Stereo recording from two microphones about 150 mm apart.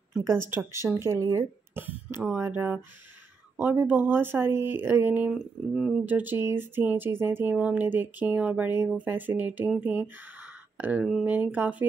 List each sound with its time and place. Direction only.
0.1 s speech: 15° right (ahead or behind)